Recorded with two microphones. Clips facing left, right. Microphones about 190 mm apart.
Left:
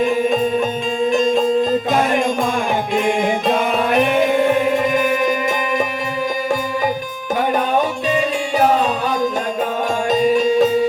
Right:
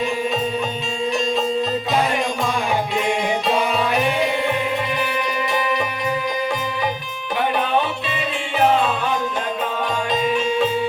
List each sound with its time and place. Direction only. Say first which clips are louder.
0.0 s music: left 6 dB; 50° left (ahead or behind)
7.8 s music: left 5 dB; 40° left (ahead or behind)
10.1 s music: left 7 dB; 40° left (ahead or behind)